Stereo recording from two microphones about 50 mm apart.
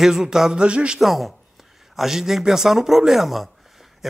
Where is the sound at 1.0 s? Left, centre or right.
Centre.